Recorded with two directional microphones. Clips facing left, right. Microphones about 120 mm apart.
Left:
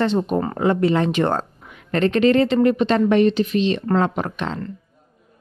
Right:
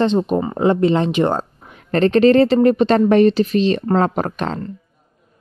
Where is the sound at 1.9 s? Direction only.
35° right (ahead or behind).